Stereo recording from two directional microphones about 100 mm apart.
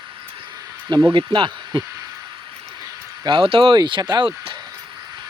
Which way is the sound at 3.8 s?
45° right (ahead or behind).